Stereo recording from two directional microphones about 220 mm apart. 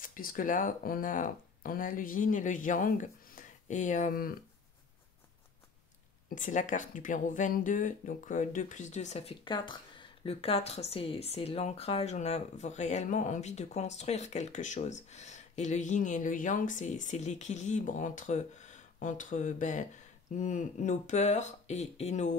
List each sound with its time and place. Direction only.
0.0 s speech: 40° left (ahead or behind)
6.3 s speech: 35° left (ahead or behind)